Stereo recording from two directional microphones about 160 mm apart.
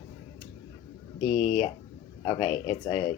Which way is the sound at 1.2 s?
35° left (ahead or behind).